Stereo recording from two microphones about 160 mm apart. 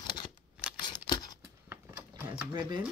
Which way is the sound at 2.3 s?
30° right (ahead or behind).